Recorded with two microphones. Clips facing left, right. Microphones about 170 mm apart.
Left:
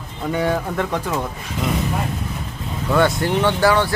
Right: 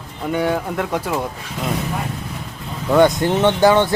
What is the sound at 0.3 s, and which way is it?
Speech, centre (ahead or behind).